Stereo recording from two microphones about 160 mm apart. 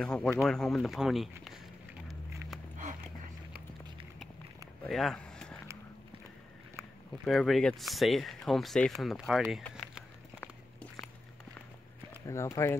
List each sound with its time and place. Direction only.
0.0 s speech: 5° left (ahead or behind)
4.8 s a sound: centre (ahead or behind)
7.2 s speech: centre (ahead or behind)
12.3 s speech: 20° left (ahead or behind)